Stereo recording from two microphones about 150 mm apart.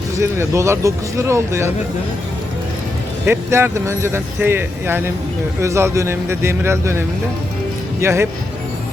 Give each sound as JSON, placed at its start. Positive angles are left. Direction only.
{"t": 0.2, "sound": "speech", "side_deg": -20}
{"t": 3.2, "sound": "speech", "side_deg": -15}
{"t": 8.0, "sound": "speech", "side_deg": -20}